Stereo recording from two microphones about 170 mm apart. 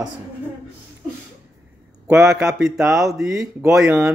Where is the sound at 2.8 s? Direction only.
20° right (ahead or behind).